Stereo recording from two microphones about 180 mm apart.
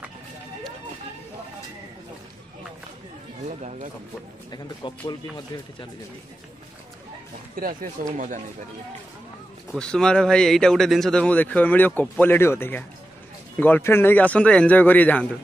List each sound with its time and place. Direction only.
3.4 s speech: 40° right (ahead or behind)
4.5 s speech: 25° left (ahead or behind)
7.5 s speech: 50° right (ahead or behind)
9.7 s speech: 5° left (ahead or behind)